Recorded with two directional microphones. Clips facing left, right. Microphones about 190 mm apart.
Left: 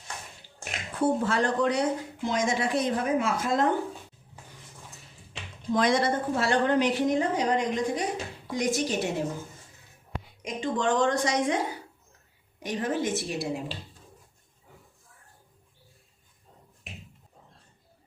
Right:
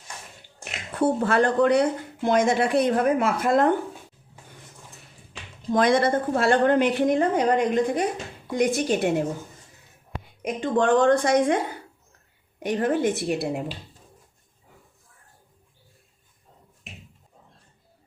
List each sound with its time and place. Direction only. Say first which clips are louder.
0.9 s speech: right 4 dB; 60° right (ahead or behind)
5.7 s speech: right 4 dB; 55° right (ahead or behind)
10.4 s speech: right 6 dB; 55° right (ahead or behind)